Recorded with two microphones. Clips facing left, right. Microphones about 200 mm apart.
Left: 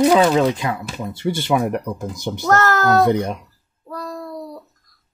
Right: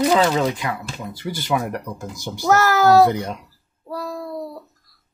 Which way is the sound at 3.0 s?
20° left (ahead or behind).